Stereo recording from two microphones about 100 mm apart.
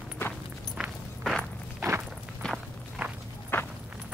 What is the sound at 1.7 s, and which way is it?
Walk, 25° right (ahead or behind).